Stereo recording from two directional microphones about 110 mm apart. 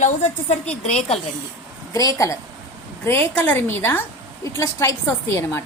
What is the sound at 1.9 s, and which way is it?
Speech, 30° left (ahead or behind).